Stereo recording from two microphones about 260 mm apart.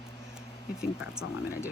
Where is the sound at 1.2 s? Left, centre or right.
Left.